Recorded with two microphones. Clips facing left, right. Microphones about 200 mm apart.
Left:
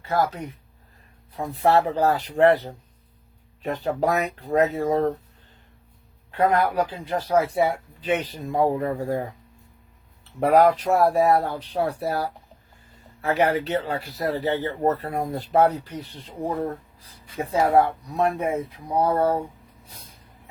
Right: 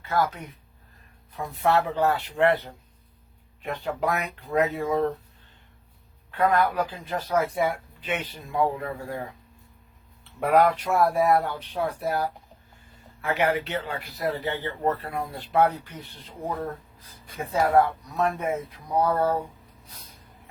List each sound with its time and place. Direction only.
1.3 s speech: 30° left (ahead or behind)
6.3 s speech: 30° left (ahead or behind)
10.4 s speech: 35° left (ahead or behind)
13.2 s speech: 40° left (ahead or behind)
17.3 s speech: 35° left (ahead or behind)